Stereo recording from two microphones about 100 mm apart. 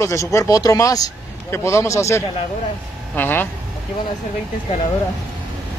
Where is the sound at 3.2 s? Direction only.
20° left (ahead or behind).